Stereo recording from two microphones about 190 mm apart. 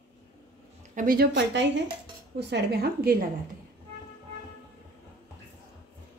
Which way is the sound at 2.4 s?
60° right (ahead or behind).